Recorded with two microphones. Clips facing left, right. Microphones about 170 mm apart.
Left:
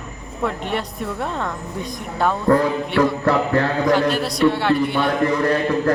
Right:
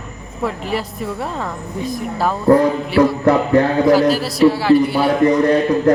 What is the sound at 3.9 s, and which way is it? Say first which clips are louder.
A woman's voice: right 5 dB; 5° right (ahead or behind).